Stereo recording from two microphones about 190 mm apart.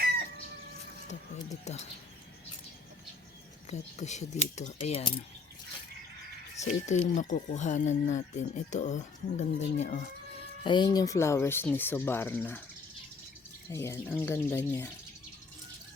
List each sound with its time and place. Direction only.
1.6 s speech: 35° left (ahead or behind)
3.7 s speech: 35° left (ahead or behind)
6.6 s speech: 40° left (ahead or behind)
10.6 s speech: 25° left (ahead or behind)
13.7 s speech: 15° left (ahead or behind)